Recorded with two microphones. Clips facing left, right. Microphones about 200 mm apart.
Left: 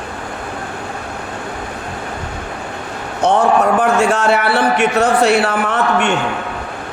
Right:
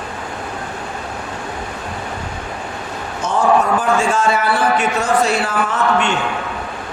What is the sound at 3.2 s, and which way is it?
A man's voice, 65° left (ahead or behind).